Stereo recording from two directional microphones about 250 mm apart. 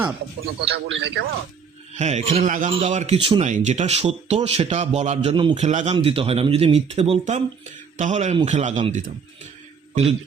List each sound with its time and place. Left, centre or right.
0.7 s a man's voice: right
1.9 s a man's voice: right